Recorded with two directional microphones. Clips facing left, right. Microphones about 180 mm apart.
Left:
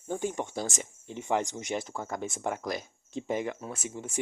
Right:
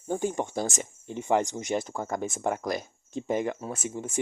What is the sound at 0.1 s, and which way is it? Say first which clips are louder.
Speech: right 3 dB; 45° right (ahead or behind).